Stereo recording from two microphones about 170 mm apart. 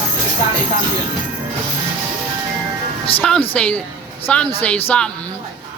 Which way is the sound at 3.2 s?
5° left (ahead or behind).